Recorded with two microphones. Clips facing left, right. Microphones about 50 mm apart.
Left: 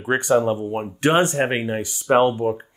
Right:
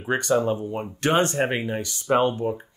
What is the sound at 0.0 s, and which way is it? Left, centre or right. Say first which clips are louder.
Speech: left 4 dB; left.